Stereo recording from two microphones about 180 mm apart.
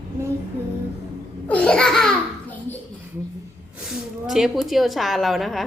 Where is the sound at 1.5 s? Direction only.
5° left (ahead or behind).